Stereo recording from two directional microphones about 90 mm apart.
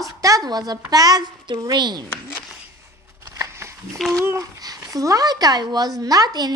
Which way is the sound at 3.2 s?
35° right (ahead or behind).